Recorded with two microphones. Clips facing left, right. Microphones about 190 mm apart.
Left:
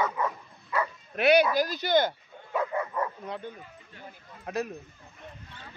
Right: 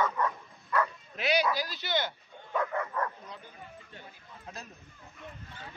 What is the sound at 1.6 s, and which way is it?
Speech, 45° left (ahead or behind).